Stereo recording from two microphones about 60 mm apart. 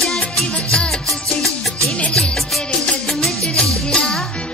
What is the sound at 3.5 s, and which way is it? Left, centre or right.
Music, centre.